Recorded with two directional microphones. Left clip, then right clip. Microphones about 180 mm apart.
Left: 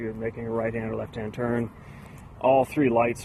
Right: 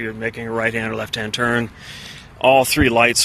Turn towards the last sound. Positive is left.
turn(degrees=-25)  # may be behind; listen again after turning